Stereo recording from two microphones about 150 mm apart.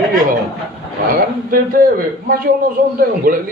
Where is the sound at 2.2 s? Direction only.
70° right (ahead or behind).